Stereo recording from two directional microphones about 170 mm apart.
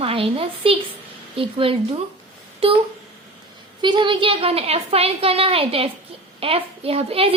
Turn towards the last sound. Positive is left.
turn(degrees=-35)  # may be behind; listen again after turning